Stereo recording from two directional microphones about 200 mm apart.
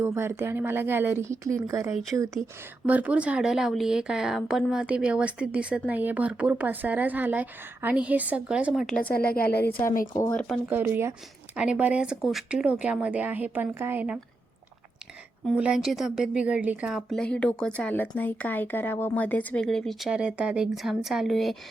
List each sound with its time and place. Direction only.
0.0 s speech: 10° right (ahead or behind); by 9.1 s 5° left (ahead or behind)
9.1 s a woman's voice: 50° left (ahead or behind)
10.1 s speech: 20° left (ahead or behind)
10.7 s speech: 10° right (ahead or behind)
15.4 s speech: 5° right (ahead or behind)